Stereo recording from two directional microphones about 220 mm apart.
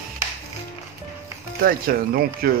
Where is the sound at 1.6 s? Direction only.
45° right (ahead or behind).